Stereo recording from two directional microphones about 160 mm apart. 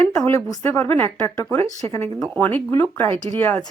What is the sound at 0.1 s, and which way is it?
A woman's voice, 15° left (ahead or behind).